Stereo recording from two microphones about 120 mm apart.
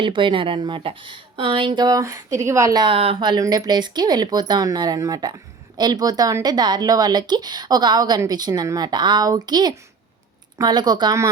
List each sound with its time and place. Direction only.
0.0 s speech: 45° right (ahead or behind); by 2.8 s 25° right (ahead or behind)
2.8 s speech: 50° right (ahead or behind)
3.2 s speech: 35° right (ahead or behind)